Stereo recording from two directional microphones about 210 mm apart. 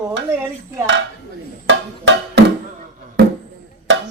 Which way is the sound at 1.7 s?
55° right (ahead or behind).